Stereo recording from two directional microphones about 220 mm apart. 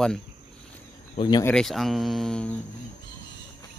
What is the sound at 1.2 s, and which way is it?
Speech, 15° left (ahead or behind).